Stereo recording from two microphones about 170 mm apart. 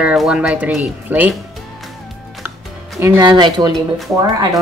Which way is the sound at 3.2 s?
25° right (ahead or behind).